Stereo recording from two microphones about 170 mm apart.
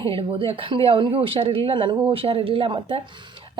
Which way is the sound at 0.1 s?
30° right (ahead or behind).